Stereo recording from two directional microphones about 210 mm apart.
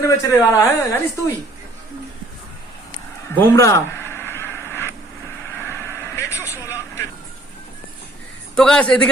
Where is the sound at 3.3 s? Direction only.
10° left (ahead or behind).